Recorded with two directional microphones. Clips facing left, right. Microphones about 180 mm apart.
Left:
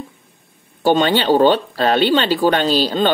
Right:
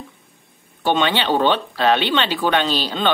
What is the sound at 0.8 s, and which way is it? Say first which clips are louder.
Speech: left 5 dB; 40° left (ahead or behind).